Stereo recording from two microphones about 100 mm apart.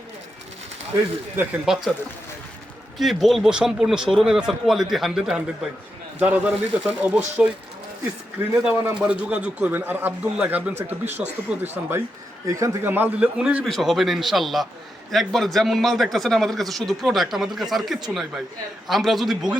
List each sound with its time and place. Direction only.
1.6 s speech: 5° right (ahead or behind)
3.0 s speech: centre (ahead or behind)
8.6 s speech: 10° right (ahead or behind)
12.5 s a man's voice: 35° right (ahead or behind)
12.8 s speech: 20° right (ahead or behind)
13.7 s speech: centre (ahead or behind)